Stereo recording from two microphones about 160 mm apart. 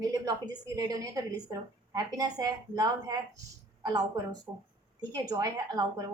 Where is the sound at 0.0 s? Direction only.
25° right (ahead or behind).